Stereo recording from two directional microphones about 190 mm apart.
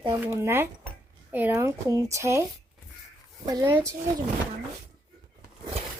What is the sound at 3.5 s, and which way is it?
Speech, 15° right (ahead or behind).